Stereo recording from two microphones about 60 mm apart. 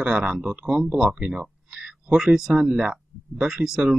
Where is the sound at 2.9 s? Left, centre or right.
Centre.